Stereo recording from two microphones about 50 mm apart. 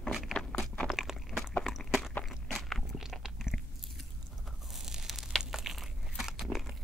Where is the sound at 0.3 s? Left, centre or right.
Centre.